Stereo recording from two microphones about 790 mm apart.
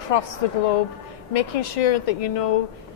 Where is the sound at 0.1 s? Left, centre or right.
Left.